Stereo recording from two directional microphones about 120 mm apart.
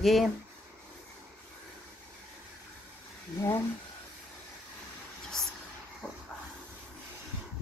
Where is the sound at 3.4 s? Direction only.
20° left (ahead or behind).